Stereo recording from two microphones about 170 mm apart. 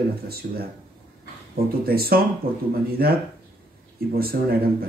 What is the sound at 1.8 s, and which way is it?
Speech, 60° right (ahead or behind).